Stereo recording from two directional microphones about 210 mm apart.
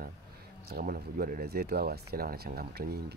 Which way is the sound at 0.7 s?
45° right (ahead or behind).